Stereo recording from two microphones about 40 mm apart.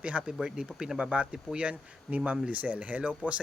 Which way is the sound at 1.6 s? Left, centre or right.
Right.